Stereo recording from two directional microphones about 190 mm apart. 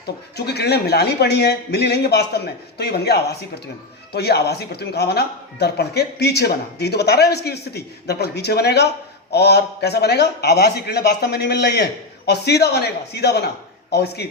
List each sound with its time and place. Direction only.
0.3 s a man's voice: 60° left (ahead or behind)